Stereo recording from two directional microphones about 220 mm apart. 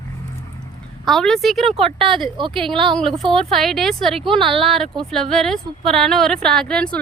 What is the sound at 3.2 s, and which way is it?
Speech, centre (ahead or behind).